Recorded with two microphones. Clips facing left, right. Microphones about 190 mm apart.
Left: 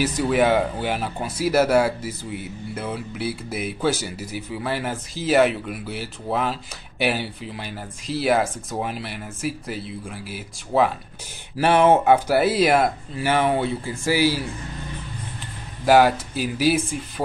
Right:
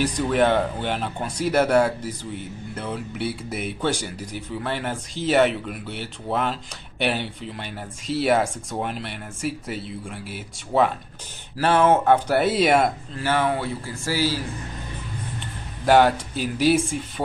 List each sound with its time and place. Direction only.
0.0 s speech: 5° left (ahead or behind)
11.5 s speech: 15° left (ahead or behind)
13.2 s speech: 15° left (ahead or behind)
15.8 s speech: 5° left (ahead or behind)